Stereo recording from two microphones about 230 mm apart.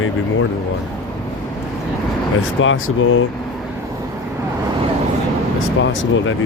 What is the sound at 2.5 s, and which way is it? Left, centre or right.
Speech, left.